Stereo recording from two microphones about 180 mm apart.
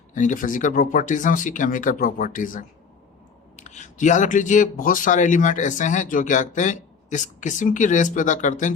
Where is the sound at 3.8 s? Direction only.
45° left (ahead or behind).